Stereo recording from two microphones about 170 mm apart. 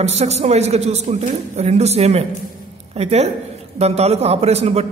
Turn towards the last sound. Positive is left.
turn(degrees=-40)  # may be behind; listen again after turning